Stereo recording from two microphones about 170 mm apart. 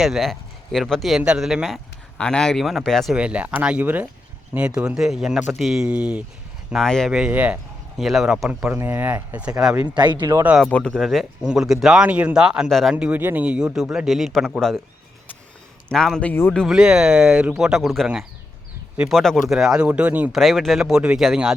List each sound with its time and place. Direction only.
0.0 s a man's voice: centre (ahead or behind)
9.9 s speech: 25° right (ahead or behind)
10.4 s a man's voice: 5° right (ahead or behind)
10.7 s speech: 5° left (ahead or behind)
15.9 s speech: 5° left (ahead or behind)